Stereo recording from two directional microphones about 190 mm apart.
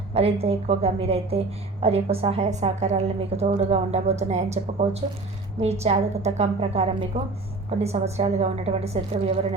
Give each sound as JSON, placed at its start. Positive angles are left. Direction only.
{"t": 0.1, "sound": "a woman's voice", "side_deg": -30}